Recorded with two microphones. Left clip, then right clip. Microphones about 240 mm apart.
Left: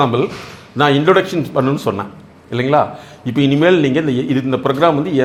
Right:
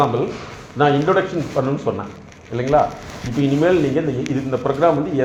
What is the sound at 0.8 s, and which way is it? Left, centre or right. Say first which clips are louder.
Speech: left 4 dB; left.